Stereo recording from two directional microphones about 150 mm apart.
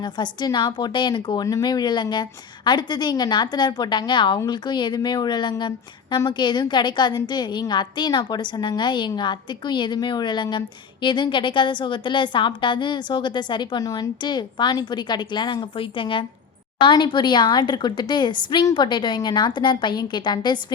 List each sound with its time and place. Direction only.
0.0 s a woman's voice: 30° left (ahead or behind)